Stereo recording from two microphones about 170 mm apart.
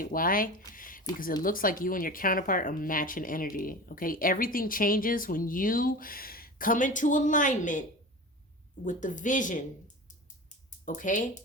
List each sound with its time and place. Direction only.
0.0 s speech: 55° left (ahead or behind)
0.7 s a sound: 55° left (ahead or behind)
1.4 s speech: 55° left (ahead or behind)